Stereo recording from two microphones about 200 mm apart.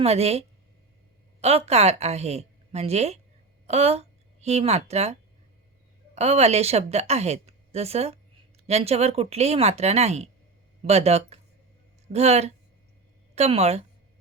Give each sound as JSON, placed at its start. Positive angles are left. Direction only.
{"t": 0.0, "sound": "a woman's voice", "side_deg": -30}
{"t": 6.1, "sound": "a woman's voice", "side_deg": -30}